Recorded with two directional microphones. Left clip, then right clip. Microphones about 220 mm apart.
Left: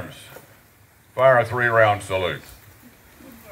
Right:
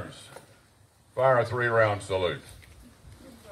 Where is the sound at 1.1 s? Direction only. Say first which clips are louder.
Left 7 dB; 25° right (ahead or behind).